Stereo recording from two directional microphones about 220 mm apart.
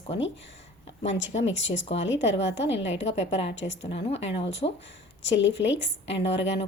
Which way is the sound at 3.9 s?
25° left (ahead or behind).